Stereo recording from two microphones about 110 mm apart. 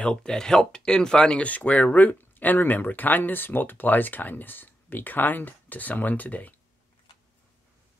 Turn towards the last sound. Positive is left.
turn(degrees=15)  # may be behind; listen again after turning